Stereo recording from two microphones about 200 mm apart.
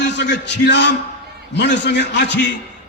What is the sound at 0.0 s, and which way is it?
A man's voice, 60° left (ahead or behind).